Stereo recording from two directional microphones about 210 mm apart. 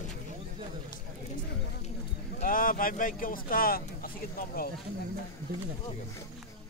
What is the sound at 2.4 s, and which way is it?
Speech, 40° left (ahead or behind).